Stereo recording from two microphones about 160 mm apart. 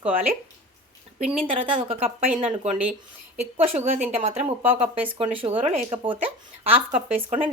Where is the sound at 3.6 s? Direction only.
40° right (ahead or behind).